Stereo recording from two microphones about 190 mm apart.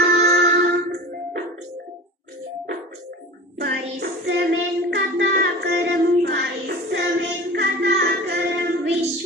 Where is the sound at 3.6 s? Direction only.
60° right (ahead or behind).